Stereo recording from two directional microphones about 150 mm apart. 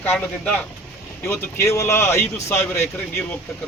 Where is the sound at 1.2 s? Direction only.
15° left (ahead or behind).